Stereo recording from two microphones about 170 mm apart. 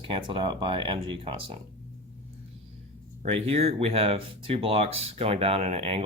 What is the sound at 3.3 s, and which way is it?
Speech, 40° right (ahead or behind).